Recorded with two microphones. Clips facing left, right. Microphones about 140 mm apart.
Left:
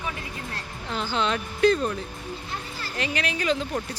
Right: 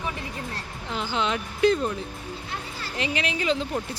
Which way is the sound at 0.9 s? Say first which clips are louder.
Left 1 dB; 15° right (ahead or behind).